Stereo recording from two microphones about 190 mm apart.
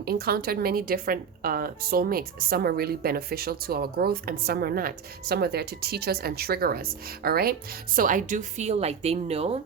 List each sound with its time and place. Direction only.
0.0 s a woman's voice: 55° right (ahead or behind); by 9.6 s 35° right (ahead or behind)